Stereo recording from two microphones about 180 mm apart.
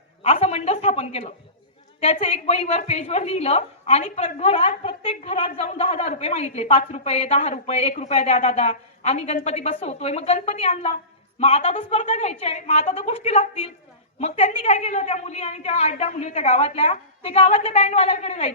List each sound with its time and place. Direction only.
0.2 s a woman's voice: 35° left (ahead or behind)